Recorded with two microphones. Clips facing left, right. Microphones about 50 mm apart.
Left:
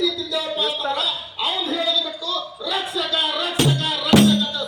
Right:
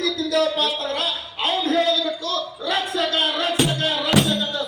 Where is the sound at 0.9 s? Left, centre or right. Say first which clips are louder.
Even; right.